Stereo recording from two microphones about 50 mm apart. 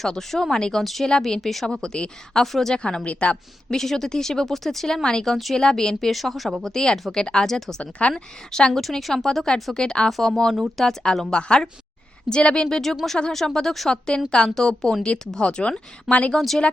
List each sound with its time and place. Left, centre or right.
0.0 s speech: centre
2.7 s speech: centre
3.7 s speech: centre
6.1 s speech: centre
7.8 s speech: left
8.5 s speech: centre
11.0 s speech: centre
12.6 s speech: centre; by 16.3 s left